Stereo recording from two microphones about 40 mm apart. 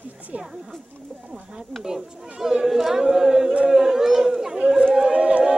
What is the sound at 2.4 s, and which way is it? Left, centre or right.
Speech, centre.